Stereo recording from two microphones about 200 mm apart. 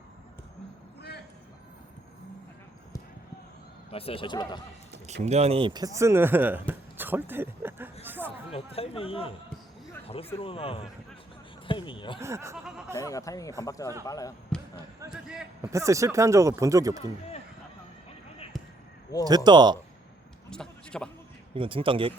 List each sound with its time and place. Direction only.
3.9 s speech: 30° left (ahead or behind)
5.2 s speech: 35° right (ahead or behind); by 8.5 s 10° right (ahead or behind)
8.5 s speech: 30° left (ahead or behind)
10.3 s speech: 30° left (ahead or behind)
12.2 s speech: 15° right (ahead or behind)
13.0 s speech: 15° left (ahead or behind)
15.6 s speech: 15° right (ahead or behind)
18.5 s a sound: centre (ahead or behind)
19.1 s speech: 15° left (ahead or behind)
19.5 s speech: 20° right (ahead or behind)
20.5 s a man's voice: 5° left (ahead or behind)
21.5 s speech: 25° right (ahead or behind)